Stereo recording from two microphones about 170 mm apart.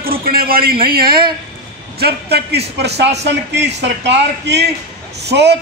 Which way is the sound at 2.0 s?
70° right (ahead or behind).